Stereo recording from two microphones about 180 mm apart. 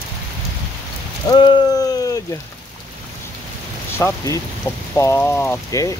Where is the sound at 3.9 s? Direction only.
15° left (ahead or behind).